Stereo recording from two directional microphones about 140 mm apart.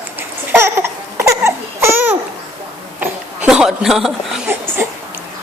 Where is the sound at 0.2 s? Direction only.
15° right (ahead or behind); by 4.4 s centre (ahead or behind).